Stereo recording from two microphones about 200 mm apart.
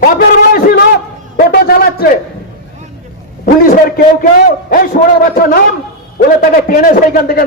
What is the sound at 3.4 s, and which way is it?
A man's voice, 45° left (ahead or behind).